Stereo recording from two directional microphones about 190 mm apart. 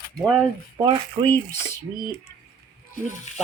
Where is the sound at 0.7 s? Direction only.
25° right (ahead or behind).